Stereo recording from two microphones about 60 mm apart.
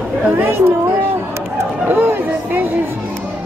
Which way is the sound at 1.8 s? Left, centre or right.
Right.